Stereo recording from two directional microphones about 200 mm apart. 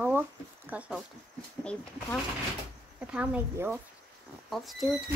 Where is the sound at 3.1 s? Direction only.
5° right (ahead or behind).